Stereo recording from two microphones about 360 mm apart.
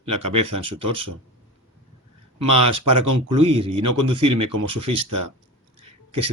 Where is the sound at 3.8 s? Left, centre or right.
Right.